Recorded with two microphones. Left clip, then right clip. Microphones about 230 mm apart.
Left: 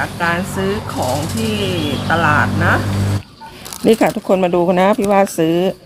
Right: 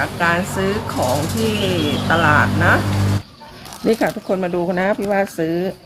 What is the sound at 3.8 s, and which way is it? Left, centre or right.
Speech, left.